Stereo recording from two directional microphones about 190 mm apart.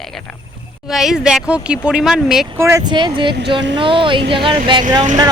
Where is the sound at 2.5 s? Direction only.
15° right (ahead or behind).